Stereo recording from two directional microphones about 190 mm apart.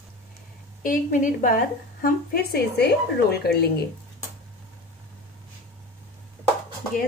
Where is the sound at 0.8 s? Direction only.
45° left (ahead or behind).